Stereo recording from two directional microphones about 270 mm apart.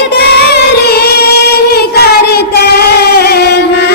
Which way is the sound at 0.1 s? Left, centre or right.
Left.